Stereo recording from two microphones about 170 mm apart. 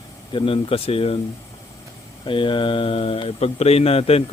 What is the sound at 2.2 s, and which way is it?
Speech, 30° left (ahead or behind).